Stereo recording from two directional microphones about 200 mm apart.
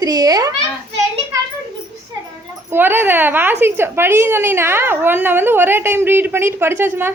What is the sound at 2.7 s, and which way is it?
A woman's voice, 10° right (ahead or behind).